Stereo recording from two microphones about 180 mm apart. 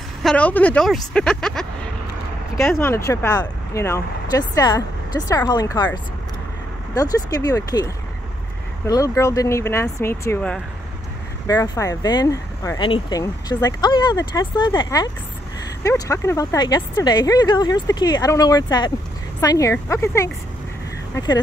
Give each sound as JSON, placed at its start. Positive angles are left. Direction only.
{"t": 0.2, "sound": "speech", "side_deg": 5}
{"t": 2.5, "sound": "speech", "side_deg": 15}
{"t": 7.0, "sound": "speech", "side_deg": 20}